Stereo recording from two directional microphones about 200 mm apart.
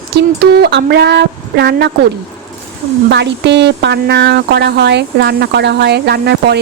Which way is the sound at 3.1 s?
60° right (ahead or behind).